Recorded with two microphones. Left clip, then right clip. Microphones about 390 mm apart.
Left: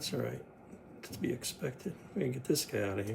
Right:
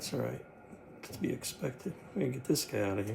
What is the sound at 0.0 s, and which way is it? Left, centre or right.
Speech, centre.